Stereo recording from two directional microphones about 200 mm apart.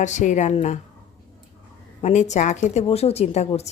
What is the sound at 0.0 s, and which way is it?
Speech, 35° left (ahead or behind).